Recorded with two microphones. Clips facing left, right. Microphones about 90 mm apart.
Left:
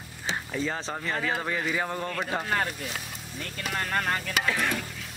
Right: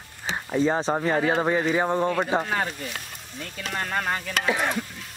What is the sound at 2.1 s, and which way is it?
Speech, 5° right (ahead or behind).